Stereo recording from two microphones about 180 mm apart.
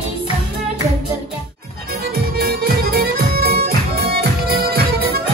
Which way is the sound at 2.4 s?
60° right (ahead or behind).